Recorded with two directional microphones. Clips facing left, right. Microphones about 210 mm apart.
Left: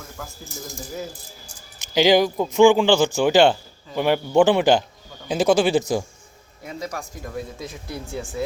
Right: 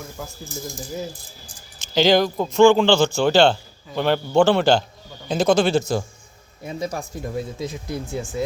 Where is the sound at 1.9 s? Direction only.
10° left (ahead or behind).